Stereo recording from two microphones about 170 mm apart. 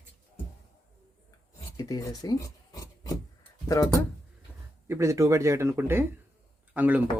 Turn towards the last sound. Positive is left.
turn(degrees=-10)  # may be behind; listen again after turning